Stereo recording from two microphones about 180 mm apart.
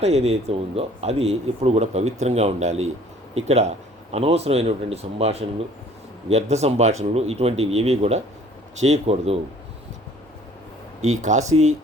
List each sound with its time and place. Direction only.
0.0 s speech: 35° right (ahead or behind)
11.2 s speech: 40° right (ahead or behind)